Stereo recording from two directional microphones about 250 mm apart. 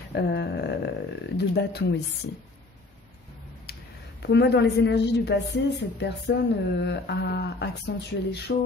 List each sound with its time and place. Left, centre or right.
0.1 s speech: left
4.2 s a woman's voice: left